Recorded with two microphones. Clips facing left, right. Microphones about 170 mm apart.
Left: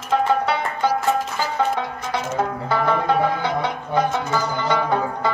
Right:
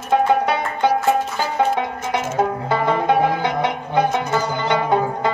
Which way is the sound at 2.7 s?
20° right (ahead or behind).